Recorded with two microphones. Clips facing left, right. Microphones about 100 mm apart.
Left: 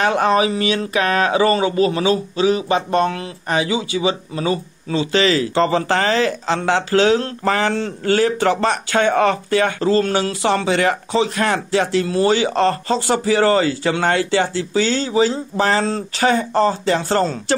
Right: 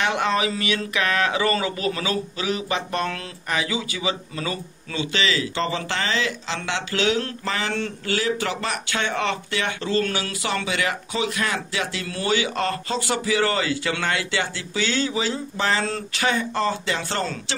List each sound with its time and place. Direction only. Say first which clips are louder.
0.0 s speech: left 6 dB; 35° left (ahead or behind)
5.1 s speech: left 8 dB; 40° left (ahead or behind)